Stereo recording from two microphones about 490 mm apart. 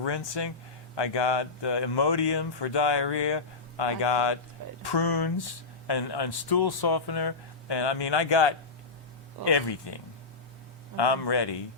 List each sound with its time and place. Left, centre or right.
0.0 s speech: left